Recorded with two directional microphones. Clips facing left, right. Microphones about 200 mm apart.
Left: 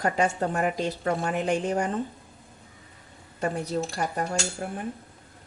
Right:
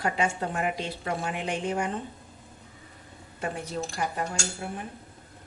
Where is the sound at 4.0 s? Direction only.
45° left (ahead or behind).